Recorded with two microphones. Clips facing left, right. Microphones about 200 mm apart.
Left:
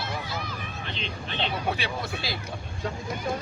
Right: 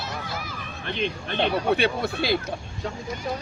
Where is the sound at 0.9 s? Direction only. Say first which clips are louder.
Right 10 dB; 55° right (ahead or behind).